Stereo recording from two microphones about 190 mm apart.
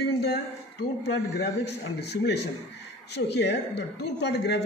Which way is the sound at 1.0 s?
65° left (ahead or behind).